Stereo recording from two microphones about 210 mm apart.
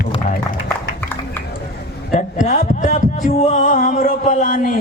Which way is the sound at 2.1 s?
35° left (ahead or behind).